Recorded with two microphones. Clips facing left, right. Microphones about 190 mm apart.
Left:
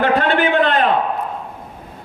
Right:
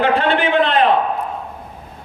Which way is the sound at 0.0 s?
45° left (ahead or behind).